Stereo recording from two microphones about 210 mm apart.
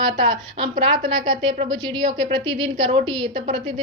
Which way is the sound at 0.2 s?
20° right (ahead or behind).